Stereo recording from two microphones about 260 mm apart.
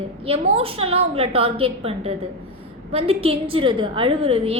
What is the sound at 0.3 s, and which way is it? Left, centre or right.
A woman's voice, right.